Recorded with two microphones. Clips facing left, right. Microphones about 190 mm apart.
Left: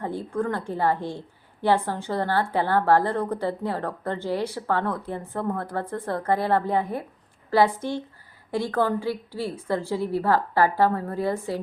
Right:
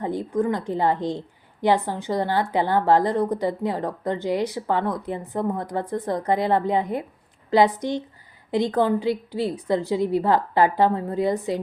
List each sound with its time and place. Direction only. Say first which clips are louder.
0.0 s a woman's voice: right 4 dB; 15° right (ahead or behind)